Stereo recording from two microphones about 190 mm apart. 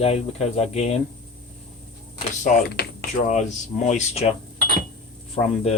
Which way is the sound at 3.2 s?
40° left (ahead or behind).